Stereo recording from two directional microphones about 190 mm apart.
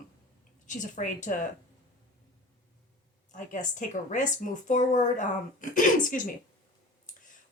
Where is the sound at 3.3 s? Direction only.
40° left (ahead or behind).